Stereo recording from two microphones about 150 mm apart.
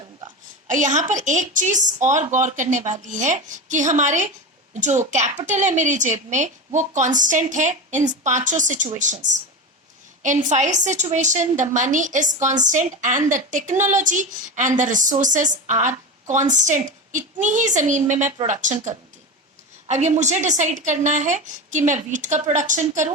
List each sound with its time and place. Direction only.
0.7 s a woman's voice: 55° right (ahead or behind)